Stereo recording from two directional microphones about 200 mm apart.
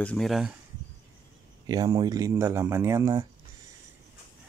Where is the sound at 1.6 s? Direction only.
20° right (ahead or behind).